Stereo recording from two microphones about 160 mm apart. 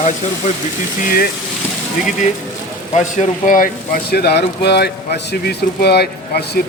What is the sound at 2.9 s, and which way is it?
Speech, 45° left (ahead or behind).